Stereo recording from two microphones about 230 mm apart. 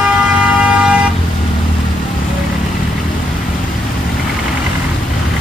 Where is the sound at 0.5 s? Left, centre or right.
Centre.